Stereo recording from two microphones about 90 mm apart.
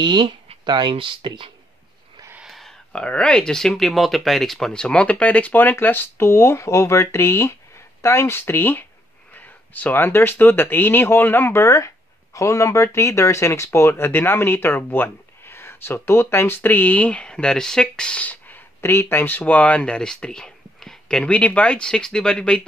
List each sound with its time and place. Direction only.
0.0 s speech: 60° right (ahead or behind)
2.4 s a sound: centre (ahead or behind)
2.9 s speech: 10° left (ahead or behind)